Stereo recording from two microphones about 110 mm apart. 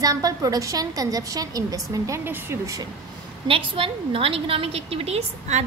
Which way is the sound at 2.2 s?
20° right (ahead or behind).